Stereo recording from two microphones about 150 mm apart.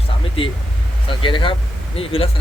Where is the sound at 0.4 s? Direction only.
40° left (ahead or behind).